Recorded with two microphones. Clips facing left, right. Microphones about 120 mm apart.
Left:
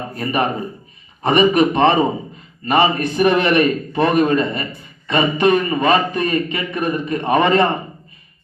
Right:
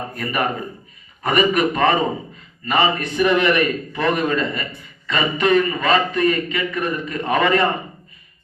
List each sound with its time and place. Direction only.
0.2 s a man's voice: 20° left (ahead or behind)